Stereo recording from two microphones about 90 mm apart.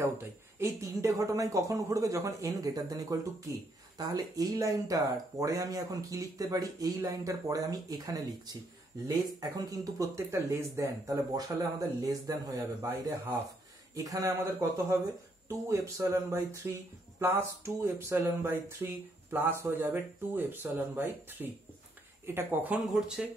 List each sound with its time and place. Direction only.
0.0 s speech: 30° right (ahead or behind)
12.1 s speech: 40° right (ahead or behind); by 22.8 s 20° right (ahead or behind)
22.9 s speech: 10° right (ahead or behind)